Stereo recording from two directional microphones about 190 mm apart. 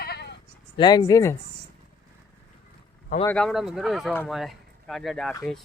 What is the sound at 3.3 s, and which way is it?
Speech, centre (ahead or behind).